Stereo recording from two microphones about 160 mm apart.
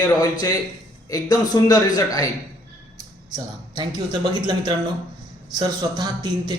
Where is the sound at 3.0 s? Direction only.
25° right (ahead or behind).